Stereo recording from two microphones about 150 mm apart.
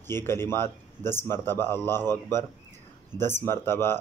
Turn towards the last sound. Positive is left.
turn(degrees=15)  # may be behind; listen again after turning